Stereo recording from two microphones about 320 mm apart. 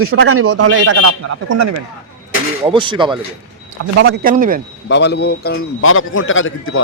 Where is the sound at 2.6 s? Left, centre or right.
Centre.